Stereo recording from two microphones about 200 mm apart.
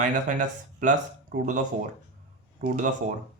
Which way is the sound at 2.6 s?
40° right (ahead or behind).